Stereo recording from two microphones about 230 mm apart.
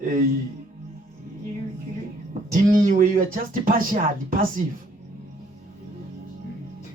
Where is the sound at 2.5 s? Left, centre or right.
Right.